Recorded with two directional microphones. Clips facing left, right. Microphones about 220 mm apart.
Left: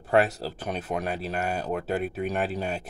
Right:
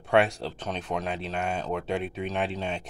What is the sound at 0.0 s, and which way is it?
Speech, centre (ahead or behind).